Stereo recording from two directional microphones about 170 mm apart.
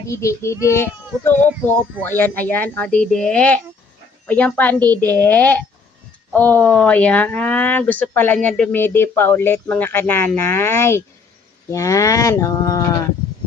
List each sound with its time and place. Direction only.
0.0 s speech: 15° left (ahead or behind)
11.7 s livestock: 20° left (ahead or behind)